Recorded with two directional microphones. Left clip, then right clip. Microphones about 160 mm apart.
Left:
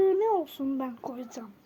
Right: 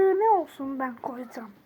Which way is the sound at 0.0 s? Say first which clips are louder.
Right 2 dB; 30° left (ahead or behind).